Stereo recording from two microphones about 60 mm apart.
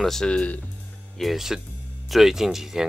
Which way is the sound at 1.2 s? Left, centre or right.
Centre.